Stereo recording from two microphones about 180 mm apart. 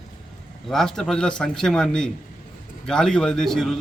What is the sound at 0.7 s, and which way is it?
A man's voice, centre (ahead or behind).